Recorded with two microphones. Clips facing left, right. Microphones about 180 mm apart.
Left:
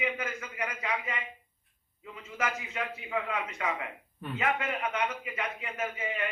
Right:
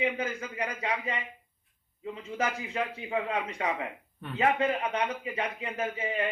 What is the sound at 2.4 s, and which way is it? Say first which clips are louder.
A man's voice: right 3 dB; 30° right (ahead or behind).